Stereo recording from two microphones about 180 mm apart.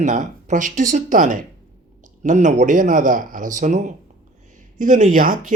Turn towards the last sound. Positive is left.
turn(degrees=-50)  # may be behind; listen again after turning